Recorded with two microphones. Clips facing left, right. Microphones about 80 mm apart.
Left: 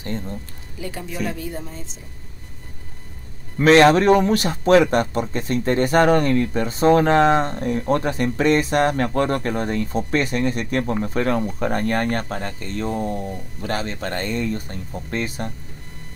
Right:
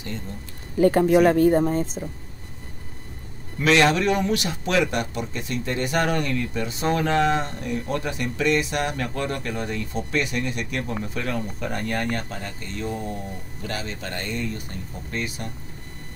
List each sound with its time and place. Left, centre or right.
0.7 s speech: right
3.5 s a man's voice: left